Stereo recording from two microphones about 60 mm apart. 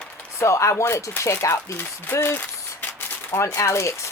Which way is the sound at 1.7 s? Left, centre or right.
Left.